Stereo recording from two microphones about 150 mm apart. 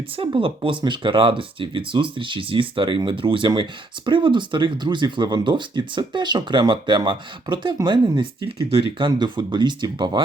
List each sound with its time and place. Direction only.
0.2 s speech: 35° right (ahead or behind)